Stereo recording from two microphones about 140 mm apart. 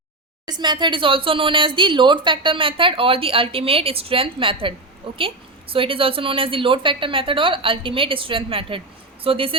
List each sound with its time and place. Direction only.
0.4 s speech: 30° right (ahead or behind)